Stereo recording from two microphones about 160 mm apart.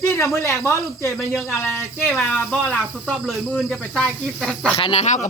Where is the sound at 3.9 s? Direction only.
Centre (ahead or behind).